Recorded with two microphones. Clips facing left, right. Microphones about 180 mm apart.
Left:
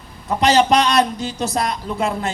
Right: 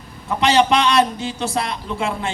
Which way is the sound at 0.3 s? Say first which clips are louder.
Left 1 dB; 40° left (ahead or behind).